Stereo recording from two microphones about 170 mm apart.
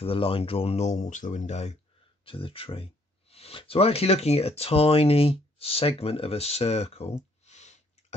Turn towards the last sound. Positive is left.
turn(degrees=40)  # may be behind; listen again after turning